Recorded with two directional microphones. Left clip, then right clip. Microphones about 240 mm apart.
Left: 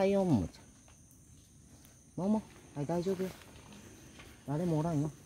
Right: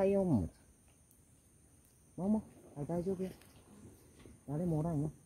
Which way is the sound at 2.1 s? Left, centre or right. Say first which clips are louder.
Left 3 dB; left.